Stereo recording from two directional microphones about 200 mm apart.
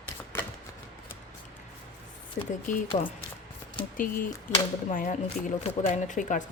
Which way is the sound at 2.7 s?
40° left (ahead or behind).